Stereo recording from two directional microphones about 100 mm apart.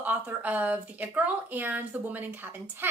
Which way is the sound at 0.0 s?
15° right (ahead or behind).